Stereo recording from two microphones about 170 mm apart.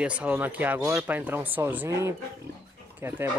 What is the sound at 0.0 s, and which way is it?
Speech, 5° right (ahead or behind).